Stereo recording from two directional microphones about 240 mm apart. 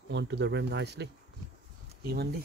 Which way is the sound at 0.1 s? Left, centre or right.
Right.